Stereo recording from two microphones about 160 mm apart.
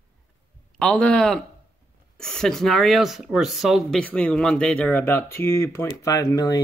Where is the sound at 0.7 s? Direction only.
5° left (ahead or behind).